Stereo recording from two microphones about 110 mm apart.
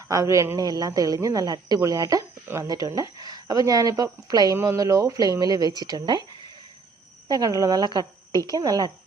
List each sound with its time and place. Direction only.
0.1 s a woman's voice: 30° right (ahead or behind)
4.5 s a woman's voice: 25° right (ahead or behind)
7.3 s a woman's voice: 35° right (ahead or behind)